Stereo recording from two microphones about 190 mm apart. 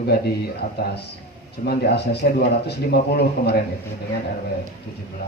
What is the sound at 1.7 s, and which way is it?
A man's voice, 60° left (ahead or behind).